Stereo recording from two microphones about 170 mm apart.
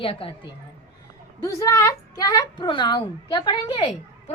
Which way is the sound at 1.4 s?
20° left (ahead or behind).